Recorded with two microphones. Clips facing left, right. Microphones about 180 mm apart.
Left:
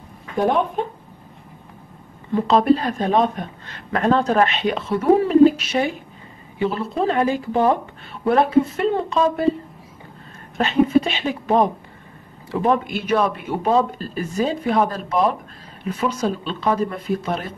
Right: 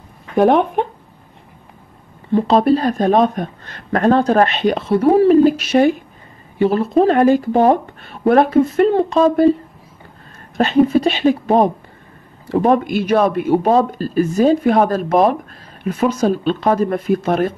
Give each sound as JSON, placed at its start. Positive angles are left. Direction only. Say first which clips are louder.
{"t": 0.4, "sound": "speech", "louder": "right 6 dB", "side_deg": -70}
{"t": 2.3, "sound": "speech", "louder": "right 3 dB", "side_deg": -35}
{"t": 10.6, "sound": "speech", "louder": "right 4 dB", "side_deg": -40}